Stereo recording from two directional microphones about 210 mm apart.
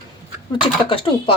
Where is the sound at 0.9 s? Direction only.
25° left (ahead or behind).